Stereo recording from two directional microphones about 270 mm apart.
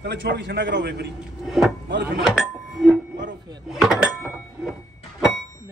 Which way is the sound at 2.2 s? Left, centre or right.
Centre.